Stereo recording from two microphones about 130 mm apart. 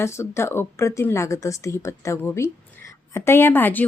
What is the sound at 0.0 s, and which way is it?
Speech, 20° left (ahead or behind).